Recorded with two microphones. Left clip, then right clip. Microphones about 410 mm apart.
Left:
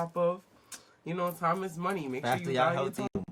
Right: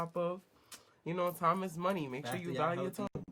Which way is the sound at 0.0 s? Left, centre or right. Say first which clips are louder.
Left 7 dB; right.